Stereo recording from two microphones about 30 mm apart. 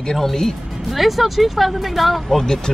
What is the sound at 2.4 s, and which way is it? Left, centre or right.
Speech, left.